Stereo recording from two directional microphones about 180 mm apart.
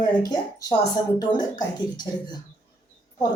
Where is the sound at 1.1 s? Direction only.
25° left (ahead or behind).